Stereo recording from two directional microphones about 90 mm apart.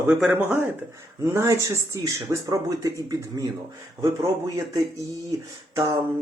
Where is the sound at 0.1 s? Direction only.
10° right (ahead or behind).